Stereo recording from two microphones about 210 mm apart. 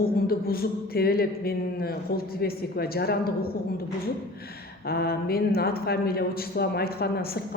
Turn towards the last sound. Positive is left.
turn(degrees=45)  # may be behind; listen again after turning